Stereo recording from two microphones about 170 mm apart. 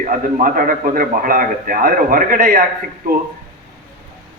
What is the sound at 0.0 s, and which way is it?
A man's voice, 50° right (ahead or behind).